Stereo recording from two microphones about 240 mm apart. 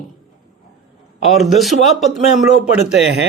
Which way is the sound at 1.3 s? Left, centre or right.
Centre.